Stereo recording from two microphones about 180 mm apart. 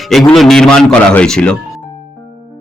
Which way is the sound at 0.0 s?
Centre (ahead or behind).